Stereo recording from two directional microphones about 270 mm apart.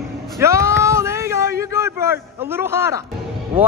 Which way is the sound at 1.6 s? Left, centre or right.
Centre.